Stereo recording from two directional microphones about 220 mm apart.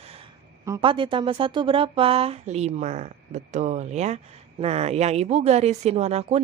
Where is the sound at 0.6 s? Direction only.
20° right (ahead or behind).